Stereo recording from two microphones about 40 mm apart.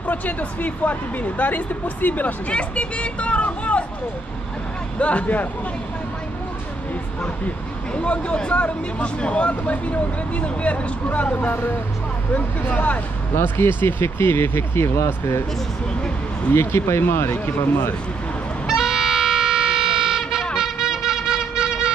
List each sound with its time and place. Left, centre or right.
0.0 s speech: left
2.5 s speech: left
4.9 s speech: left
7.9 s speech: left
13.3 s speech: left
16.5 s speech: left
18.7 s music: centre